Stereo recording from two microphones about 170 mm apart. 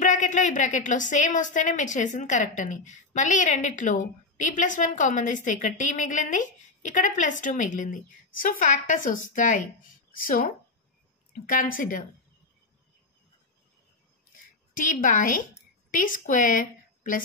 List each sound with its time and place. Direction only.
0.0 s a woman's voice: 45° left (ahead or behind)
14.8 s a woman's voice: 50° left (ahead or behind)